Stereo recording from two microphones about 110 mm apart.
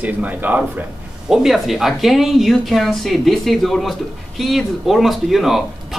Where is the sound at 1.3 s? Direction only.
5° right (ahead or behind).